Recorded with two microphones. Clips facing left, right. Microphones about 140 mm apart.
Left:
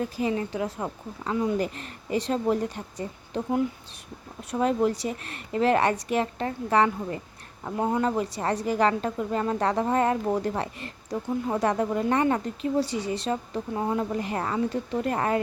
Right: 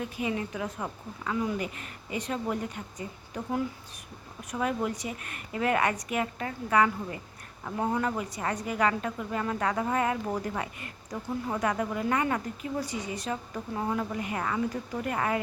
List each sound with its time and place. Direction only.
0.0 s a woman's voice: 35° left (ahead or behind)